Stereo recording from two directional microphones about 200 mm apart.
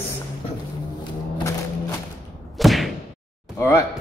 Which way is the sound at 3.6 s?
15° left (ahead or behind).